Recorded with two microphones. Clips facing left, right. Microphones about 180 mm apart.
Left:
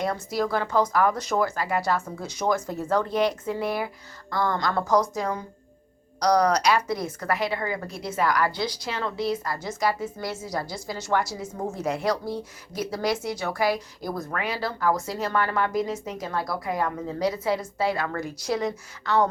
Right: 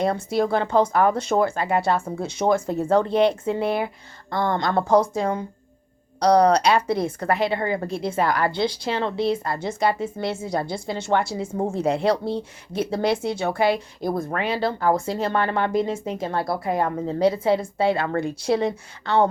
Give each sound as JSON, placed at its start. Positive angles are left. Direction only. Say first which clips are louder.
{"t": 0.0, "sound": "a woman's voice", "louder": "right 5 dB", "side_deg": -30}